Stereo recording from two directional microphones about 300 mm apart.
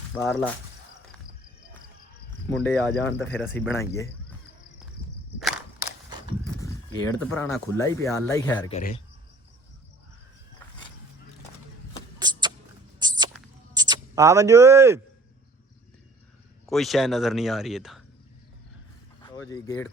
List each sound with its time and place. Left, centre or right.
0.1 s speech: centre
2.5 s speech: centre
5.4 s cap gun: centre
6.6 s speech: centre
8.7 s speech: left
12.2 s a sound: centre
13.7 s speech: centre
16.6 s speech: centre
19.2 s speech: centre